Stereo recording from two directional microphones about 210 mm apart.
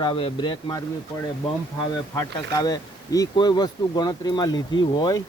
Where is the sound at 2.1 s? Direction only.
15° left (ahead or behind).